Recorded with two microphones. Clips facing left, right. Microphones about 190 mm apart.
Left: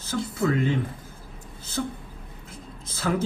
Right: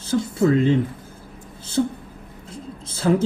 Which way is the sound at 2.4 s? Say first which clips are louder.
Right 9 dB; 30° right (ahead or behind).